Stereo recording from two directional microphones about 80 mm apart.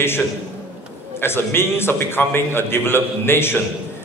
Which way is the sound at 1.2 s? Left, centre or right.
Left.